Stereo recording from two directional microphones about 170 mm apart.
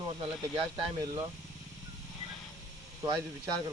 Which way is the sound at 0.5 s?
25° right (ahead or behind).